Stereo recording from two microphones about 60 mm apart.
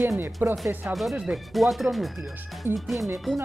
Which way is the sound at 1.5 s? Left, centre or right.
Centre.